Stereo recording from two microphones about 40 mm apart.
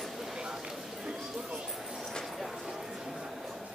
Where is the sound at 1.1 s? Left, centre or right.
Right.